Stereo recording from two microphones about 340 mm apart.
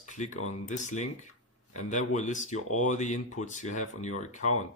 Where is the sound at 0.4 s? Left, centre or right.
Left.